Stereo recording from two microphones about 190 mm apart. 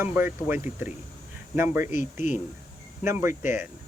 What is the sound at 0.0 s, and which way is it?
Speech, 10° right (ahead or behind).